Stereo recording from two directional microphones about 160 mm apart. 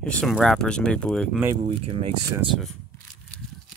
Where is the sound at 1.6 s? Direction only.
35° right (ahead or behind).